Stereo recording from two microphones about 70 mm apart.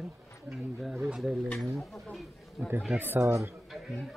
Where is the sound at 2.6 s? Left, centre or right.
Right.